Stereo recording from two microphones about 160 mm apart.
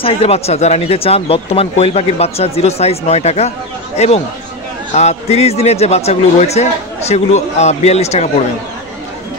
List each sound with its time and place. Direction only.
0.0 s a man's voice: 35° left (ahead or behind)